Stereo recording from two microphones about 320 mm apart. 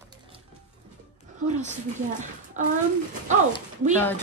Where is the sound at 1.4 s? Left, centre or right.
Right.